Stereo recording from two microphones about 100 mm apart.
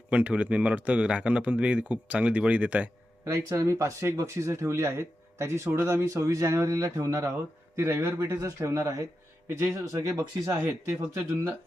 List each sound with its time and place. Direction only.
0.1 s speech: 15° right (ahead or behind)
3.3 s speech: 30° right (ahead or behind)
10.6 s speech: 25° right (ahead or behind)